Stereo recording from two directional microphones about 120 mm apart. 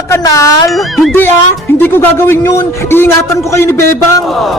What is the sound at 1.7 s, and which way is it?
Speech, 15° left (ahead or behind).